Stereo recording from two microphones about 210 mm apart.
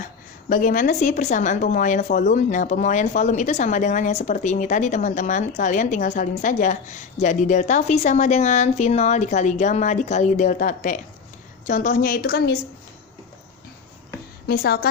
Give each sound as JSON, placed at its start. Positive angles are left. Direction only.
{"t": 0.4, "sound": "speech", "side_deg": 40}
{"t": 14.4, "sound": "a woman's voice", "side_deg": 45}